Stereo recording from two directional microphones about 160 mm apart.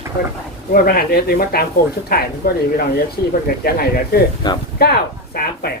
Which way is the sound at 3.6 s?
75° left (ahead or behind).